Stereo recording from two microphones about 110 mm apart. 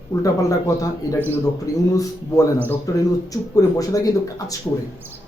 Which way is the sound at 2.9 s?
30° left (ahead or behind).